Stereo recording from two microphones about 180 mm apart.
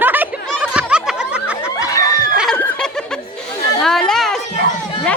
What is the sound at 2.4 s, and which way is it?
Snicker, centre (ahead or behind).